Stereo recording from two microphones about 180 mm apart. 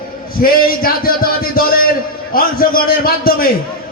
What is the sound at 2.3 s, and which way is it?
A man's voice, 55° left (ahead or behind).